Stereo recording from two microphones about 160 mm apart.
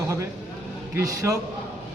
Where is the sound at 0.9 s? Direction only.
20° right (ahead or behind).